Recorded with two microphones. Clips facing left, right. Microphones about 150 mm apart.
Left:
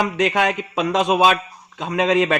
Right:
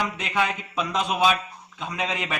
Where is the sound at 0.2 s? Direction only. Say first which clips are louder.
Left 7 dB; 80° left.